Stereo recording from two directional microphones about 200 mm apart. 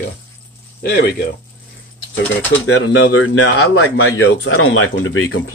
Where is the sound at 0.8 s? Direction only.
50° left (ahead or behind).